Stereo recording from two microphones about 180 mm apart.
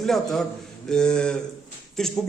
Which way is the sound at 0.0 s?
Centre (ahead or behind).